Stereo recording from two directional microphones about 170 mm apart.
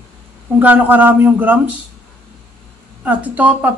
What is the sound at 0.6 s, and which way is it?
Speech, 10° right (ahead or behind).